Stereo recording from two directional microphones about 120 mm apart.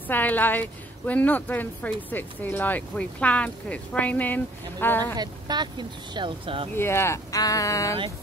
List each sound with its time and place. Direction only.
0.1 s a woman's voice: 15° left (ahead or behind)
5.1 s speech: 35° right (ahead or behind)
6.7 s speech: 20° left (ahead or behind)